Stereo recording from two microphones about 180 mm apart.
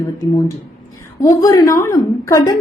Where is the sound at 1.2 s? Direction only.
20° left (ahead or behind).